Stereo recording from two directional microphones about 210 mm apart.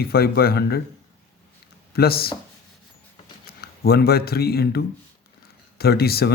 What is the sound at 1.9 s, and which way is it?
Speech, 45° left (ahead or behind).